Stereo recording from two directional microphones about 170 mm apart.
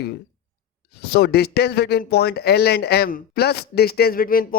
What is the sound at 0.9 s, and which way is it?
A man's voice, 70° left (ahead or behind).